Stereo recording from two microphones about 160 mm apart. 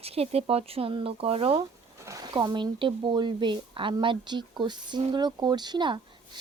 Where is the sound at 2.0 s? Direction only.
25° right (ahead or behind).